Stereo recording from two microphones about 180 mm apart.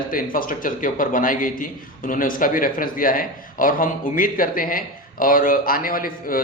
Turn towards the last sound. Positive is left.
turn(degrees=50)  # may be behind; listen again after turning